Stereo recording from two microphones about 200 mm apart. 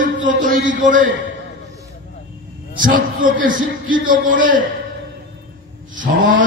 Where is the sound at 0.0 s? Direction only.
40° right (ahead or behind).